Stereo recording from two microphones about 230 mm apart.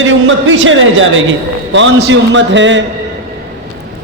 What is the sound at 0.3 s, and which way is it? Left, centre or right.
A man's voice, right.